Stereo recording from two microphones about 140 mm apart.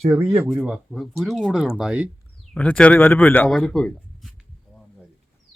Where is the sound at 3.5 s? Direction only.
Centre (ahead or behind).